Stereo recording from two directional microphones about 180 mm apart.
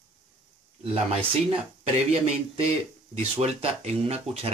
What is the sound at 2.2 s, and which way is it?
Speech, 35° right (ahead or behind).